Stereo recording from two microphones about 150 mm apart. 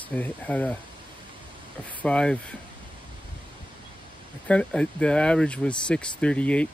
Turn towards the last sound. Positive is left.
turn(degrees=10)  # may be behind; listen again after turning